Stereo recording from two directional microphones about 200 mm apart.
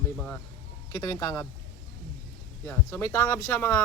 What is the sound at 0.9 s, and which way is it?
Speech, 20° left (ahead or behind).